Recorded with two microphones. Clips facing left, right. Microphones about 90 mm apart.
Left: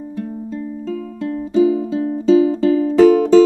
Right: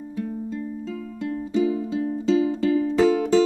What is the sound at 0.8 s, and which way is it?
Music, 40° left (ahead or behind).